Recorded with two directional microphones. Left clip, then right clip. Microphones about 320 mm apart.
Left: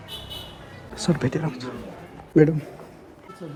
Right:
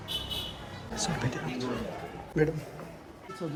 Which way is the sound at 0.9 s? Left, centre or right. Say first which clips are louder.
Left 7 dB; centre.